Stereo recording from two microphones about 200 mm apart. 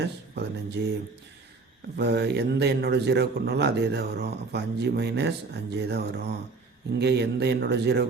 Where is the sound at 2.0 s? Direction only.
55° right (ahead or behind).